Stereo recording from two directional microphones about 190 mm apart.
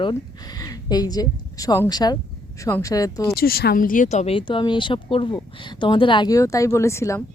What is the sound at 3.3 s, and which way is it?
Speech, 55° left (ahead or behind).